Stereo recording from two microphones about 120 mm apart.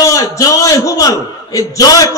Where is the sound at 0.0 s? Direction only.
30° left (ahead or behind).